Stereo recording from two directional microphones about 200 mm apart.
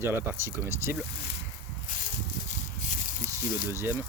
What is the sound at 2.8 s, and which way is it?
Snake, 40° left (ahead or behind).